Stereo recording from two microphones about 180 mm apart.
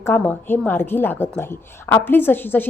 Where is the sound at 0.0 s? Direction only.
10° left (ahead or behind).